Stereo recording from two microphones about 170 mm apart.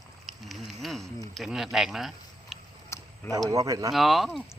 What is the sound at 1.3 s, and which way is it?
Speech, centre (ahead or behind).